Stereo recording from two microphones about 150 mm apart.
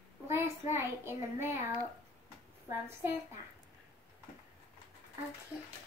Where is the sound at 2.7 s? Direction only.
15° right (ahead or behind).